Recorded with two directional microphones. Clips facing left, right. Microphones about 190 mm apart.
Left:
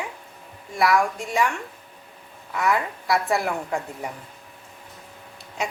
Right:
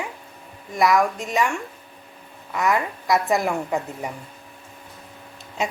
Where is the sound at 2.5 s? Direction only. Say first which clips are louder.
Right 1 dB; 20° right (ahead or behind).